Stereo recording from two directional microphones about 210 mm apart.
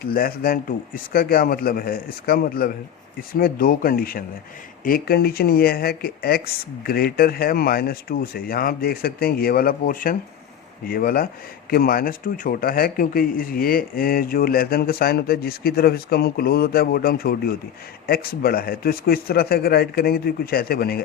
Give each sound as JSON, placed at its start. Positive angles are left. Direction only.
{"t": 0.0, "sound": "a man's voice", "side_deg": 45}